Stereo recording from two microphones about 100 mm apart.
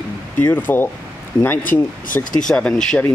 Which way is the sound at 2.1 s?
30° left (ahead or behind).